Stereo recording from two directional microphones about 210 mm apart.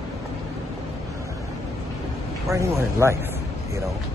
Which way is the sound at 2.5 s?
15° right (ahead or behind).